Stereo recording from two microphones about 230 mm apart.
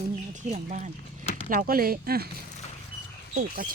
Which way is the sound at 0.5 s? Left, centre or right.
Right.